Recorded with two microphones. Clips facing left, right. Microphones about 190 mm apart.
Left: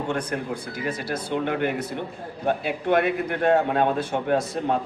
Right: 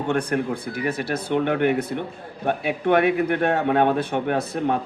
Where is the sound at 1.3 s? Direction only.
60° right (ahead or behind).